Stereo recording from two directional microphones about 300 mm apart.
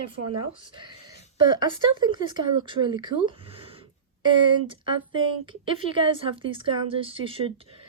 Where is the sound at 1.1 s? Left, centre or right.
Centre.